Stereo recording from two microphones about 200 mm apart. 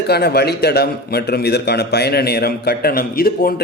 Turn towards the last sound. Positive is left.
turn(degrees=45)  # may be behind; listen again after turning